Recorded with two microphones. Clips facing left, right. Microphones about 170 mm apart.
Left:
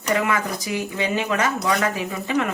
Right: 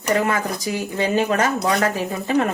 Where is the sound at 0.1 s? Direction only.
35° right (ahead or behind).